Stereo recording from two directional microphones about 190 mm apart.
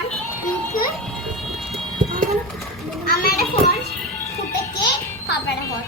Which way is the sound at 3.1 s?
50° left (ahead or behind).